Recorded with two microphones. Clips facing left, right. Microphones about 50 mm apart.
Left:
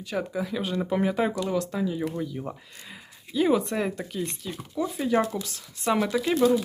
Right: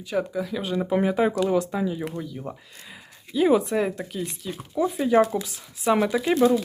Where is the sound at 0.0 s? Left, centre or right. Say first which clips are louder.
Right 3 dB; centre.